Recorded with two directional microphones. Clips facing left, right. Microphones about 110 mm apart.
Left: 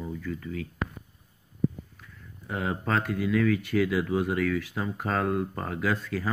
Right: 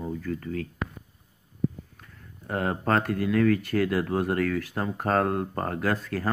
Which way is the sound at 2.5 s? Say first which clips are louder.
Right 3 dB; 50° right (ahead or behind).